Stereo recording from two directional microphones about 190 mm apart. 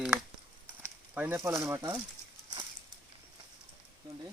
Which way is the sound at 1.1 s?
10° right (ahead or behind).